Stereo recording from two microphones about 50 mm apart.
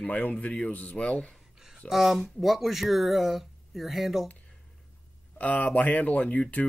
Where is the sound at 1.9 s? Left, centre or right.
Centre.